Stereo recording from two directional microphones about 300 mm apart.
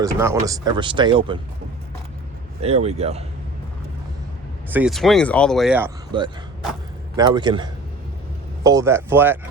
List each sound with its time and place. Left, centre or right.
0.0 s speech: centre
2.6 s speech: right
4.7 s speech: centre